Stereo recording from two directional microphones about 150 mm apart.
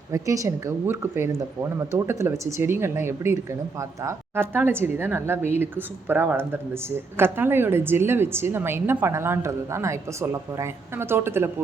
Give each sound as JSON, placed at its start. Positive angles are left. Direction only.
{"t": 0.1, "sound": "a woman's voice", "side_deg": -20}